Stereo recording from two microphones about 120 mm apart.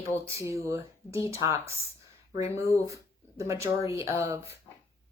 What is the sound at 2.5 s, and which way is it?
Speech, 20° left (ahead or behind).